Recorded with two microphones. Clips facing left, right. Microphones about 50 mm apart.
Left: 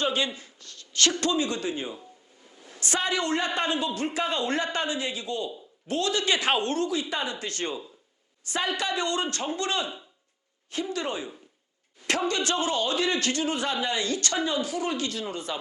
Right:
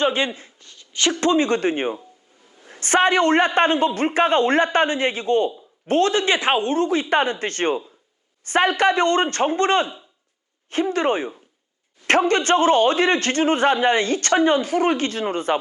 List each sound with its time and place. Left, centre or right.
0.0 s speech: right
0.7 s a woman's voice: centre
1.3 s a man's voice: right